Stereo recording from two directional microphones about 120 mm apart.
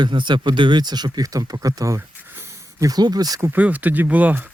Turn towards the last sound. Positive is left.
turn(degrees=-15)  # may be behind; listen again after turning